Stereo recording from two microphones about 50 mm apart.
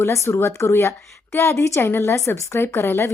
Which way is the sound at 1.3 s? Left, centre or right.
Left.